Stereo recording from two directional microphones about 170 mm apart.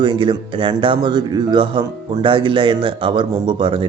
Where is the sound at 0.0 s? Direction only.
30° right (ahead or behind).